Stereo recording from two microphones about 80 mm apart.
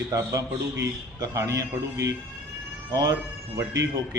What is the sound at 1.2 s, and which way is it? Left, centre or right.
Speech, right.